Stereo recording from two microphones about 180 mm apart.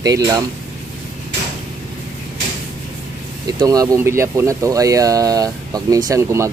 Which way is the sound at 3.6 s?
20° right (ahead or behind).